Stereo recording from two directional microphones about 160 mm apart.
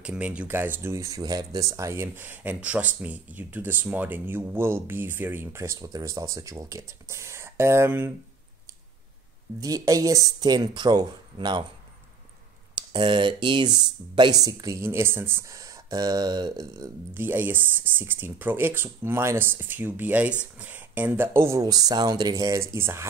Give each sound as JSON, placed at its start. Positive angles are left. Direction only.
{"t": 0.0, "sound": "speech", "side_deg": -5}
{"t": 9.6, "sound": "speech", "side_deg": -20}
{"t": 12.7, "sound": "speech", "side_deg": -30}